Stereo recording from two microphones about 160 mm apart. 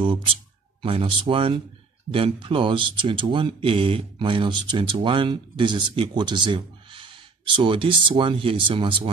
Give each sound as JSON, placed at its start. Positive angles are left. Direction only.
{"t": 0.0, "sound": "speech", "side_deg": -35}